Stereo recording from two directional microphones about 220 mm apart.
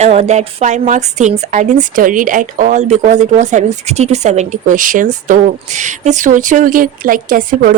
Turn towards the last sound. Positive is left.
turn(degrees=-40)  # may be behind; listen again after turning